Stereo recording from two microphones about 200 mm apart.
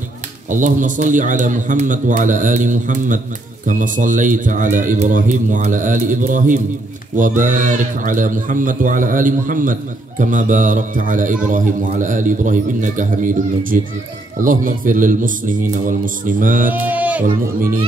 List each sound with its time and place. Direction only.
0.5 s speech: 40° right (ahead or behind)
16.6 s speech: 10° right (ahead or behind)